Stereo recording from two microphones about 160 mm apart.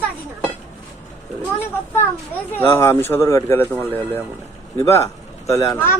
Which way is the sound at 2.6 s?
15° left (ahead or behind).